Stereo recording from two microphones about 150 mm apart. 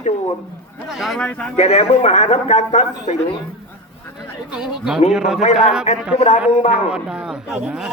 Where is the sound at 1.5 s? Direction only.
45° left (ahead or behind).